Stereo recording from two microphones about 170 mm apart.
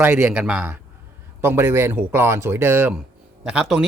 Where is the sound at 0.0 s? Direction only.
10° right (ahead or behind).